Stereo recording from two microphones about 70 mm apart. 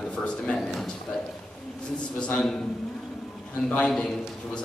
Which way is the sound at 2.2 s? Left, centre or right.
Centre.